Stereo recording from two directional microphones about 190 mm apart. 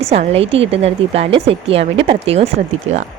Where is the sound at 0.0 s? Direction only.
30° right (ahead or behind).